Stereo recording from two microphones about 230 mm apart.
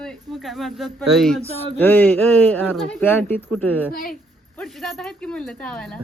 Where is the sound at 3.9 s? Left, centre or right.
Left.